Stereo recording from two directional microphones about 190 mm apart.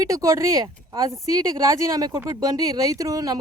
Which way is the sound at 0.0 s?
15° right (ahead or behind).